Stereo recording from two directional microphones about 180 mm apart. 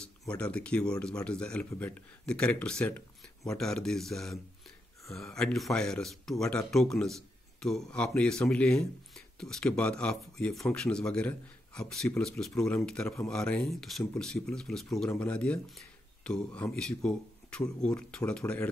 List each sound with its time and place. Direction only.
0.0 s speech: 5° left (ahead or behind)